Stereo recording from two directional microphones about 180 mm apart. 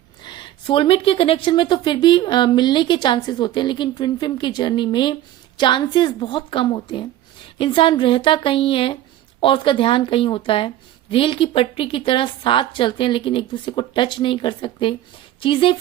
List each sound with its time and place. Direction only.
0.2 s a woman's voice: 25° left (ahead or behind)